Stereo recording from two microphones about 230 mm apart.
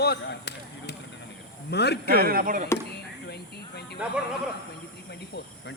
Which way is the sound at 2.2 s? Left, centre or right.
Right.